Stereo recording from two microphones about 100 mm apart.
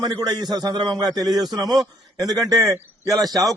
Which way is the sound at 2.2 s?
40° right (ahead or behind).